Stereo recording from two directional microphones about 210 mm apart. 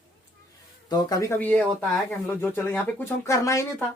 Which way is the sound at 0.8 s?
15° left (ahead or behind).